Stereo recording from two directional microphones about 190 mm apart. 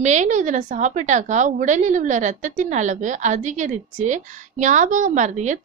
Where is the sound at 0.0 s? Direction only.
40° right (ahead or behind).